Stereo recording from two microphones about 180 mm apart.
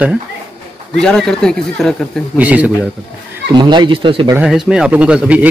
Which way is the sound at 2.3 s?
10° right (ahead or behind).